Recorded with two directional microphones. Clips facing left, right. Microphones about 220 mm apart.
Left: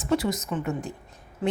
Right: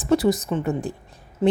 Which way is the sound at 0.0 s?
35° right (ahead or behind).